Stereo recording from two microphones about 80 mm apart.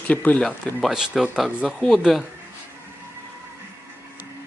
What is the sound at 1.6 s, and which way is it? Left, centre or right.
Speech, centre.